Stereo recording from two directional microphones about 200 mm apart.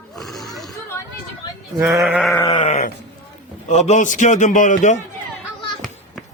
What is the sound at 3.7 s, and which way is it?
A man's voice, 35° left (ahead or behind).